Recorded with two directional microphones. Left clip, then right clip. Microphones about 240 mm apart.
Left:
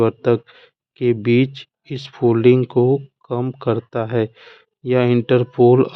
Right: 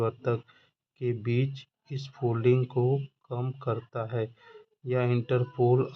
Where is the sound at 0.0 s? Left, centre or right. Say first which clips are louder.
Left 13 dB; left.